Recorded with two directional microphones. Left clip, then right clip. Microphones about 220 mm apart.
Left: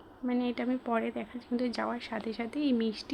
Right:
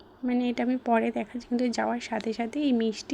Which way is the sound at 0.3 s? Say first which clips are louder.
Right 4 dB; 15° right (ahead or behind).